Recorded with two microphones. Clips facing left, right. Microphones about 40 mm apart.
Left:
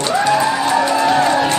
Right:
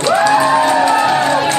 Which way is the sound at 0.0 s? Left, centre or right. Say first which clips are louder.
Right 3 dB; right.